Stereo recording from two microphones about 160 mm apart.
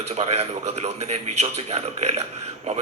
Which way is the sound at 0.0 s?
40° right (ahead or behind).